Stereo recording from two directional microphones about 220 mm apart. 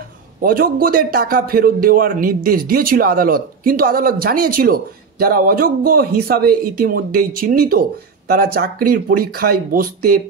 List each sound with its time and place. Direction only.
0.4 s a man's voice: 40° right (ahead or behind)